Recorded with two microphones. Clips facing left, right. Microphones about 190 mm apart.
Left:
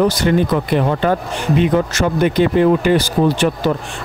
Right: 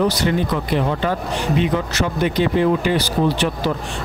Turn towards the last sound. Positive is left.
turn(degrees=45)  # may be behind; listen again after turning